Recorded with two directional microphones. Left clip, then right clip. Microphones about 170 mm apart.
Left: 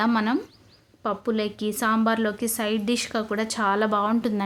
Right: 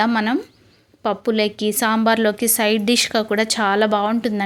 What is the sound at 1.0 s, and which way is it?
A woman's voice, 25° right (ahead or behind).